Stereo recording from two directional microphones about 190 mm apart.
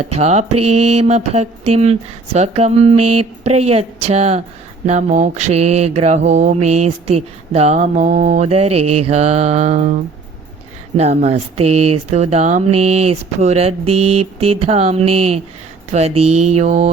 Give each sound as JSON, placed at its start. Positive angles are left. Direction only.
{"t": 0.0, "sound": "mantra", "side_deg": -35}